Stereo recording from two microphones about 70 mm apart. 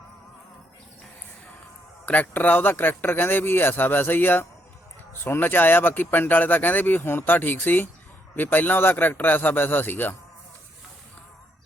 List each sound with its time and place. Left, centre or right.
2.0 s speech: left